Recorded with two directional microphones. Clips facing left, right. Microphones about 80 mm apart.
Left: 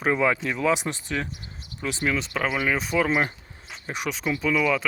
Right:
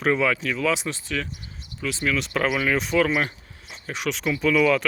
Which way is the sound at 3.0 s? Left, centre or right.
Left.